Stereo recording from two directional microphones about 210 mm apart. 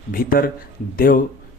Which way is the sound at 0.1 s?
45° left (ahead or behind).